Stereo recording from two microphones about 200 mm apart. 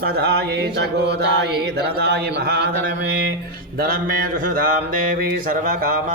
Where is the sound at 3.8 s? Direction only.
45° right (ahead or behind).